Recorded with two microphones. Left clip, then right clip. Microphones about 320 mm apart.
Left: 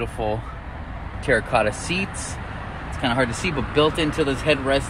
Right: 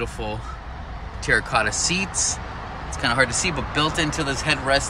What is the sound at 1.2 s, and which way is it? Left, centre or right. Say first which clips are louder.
Speech: left 1 dB; centre.